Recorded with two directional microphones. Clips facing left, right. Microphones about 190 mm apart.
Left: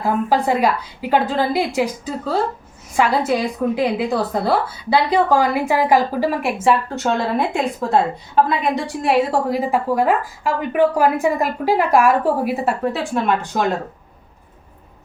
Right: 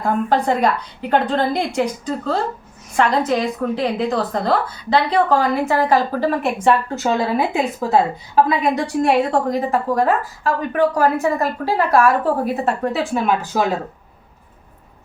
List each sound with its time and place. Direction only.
0.0 s a woman's voice: 5° left (ahead or behind)